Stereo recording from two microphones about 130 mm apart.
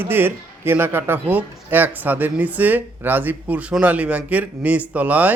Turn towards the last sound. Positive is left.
turn(degrees=-10)  # may be behind; listen again after turning